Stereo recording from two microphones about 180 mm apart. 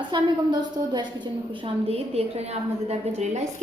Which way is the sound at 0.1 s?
25° right (ahead or behind).